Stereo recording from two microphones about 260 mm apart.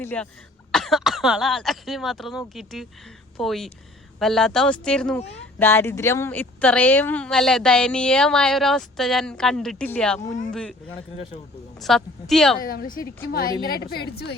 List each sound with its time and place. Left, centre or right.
0.0 s speech: centre
11.8 s speech: centre
12.5 s a woman's voice: left